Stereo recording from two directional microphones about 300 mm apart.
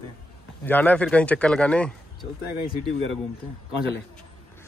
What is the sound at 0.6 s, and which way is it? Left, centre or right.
Speech, centre.